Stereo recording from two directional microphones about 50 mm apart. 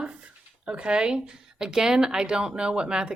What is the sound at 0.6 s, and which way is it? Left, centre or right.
A woman's voice, right.